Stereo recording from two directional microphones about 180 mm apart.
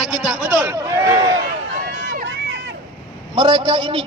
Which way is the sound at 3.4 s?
25° right (ahead or behind).